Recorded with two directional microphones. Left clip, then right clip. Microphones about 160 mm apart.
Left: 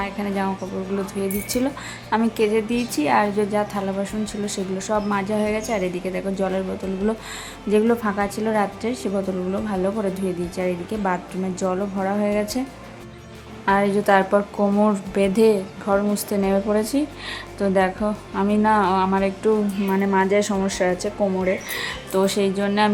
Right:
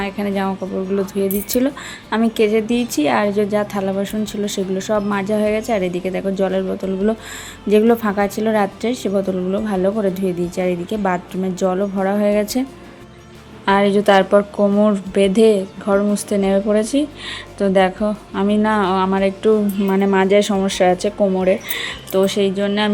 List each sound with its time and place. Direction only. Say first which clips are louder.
0.0 s a woman's voice: right 4 dB; 25° right (ahead or behind)
13.7 s speech: right 4 dB; 25° right (ahead or behind); by 22.9 s 5° right (ahead or behind)